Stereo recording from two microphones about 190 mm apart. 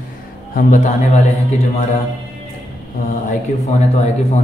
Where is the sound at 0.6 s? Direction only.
45° left (ahead or behind).